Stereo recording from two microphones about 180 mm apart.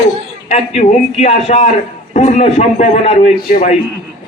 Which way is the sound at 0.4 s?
35° left (ahead or behind).